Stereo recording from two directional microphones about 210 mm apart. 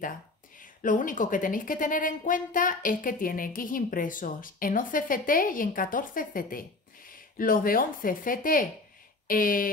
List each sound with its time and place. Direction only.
0.6 s a woman's voice: 40° left (ahead or behind)